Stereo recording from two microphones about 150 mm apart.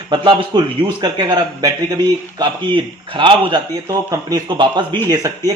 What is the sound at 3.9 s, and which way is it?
A man's voice, 20° right (ahead or behind).